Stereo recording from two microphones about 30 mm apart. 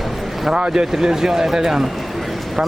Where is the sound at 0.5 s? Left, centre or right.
Right.